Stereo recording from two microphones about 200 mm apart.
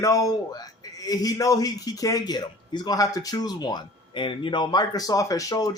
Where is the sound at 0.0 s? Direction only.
15° left (ahead or behind).